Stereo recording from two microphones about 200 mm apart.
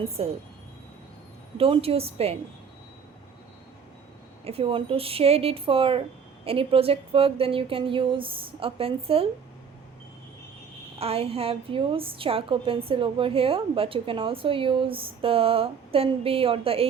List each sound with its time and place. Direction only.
0.0 s a woman's voice: 30° right (ahead or behind)
1.5 s a woman's voice: 30° right (ahead or behind)
4.4 s a woman's voice: 30° right (ahead or behind)
11.0 s a woman's voice: 30° right (ahead or behind)